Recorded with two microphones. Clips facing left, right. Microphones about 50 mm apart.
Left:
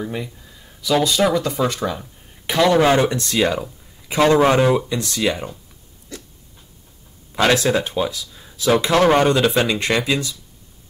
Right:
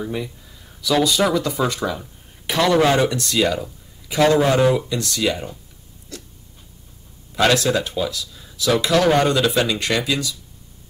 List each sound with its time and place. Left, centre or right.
0.0 s speech: centre
2.5 s speech: centre
2.9 s speech: left
7.4 s speech: left